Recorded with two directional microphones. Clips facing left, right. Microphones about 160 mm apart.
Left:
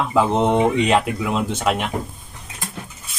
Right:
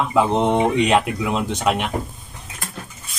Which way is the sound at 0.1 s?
Centre (ahead or behind).